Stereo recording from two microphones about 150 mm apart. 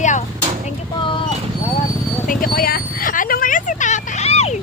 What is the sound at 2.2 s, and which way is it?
Vehicle, 65° left (ahead or behind).